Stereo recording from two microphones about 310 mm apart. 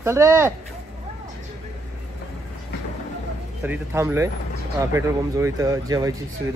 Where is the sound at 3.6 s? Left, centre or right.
Centre.